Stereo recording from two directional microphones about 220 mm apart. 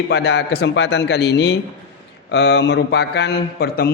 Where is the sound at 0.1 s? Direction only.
50° left (ahead or behind).